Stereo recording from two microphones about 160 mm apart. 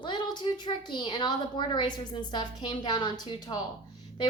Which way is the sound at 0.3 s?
30° left (ahead or behind).